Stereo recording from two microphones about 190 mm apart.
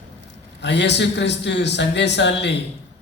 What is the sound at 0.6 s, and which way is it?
A man's voice, 65° left (ahead or behind).